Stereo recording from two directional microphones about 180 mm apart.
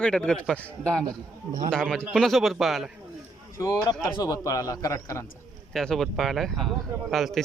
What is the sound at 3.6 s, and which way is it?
Speech, 20° left (ahead or behind).